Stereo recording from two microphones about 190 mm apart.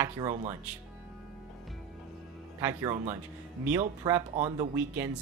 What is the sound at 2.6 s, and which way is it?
Speech, 15° right (ahead or behind).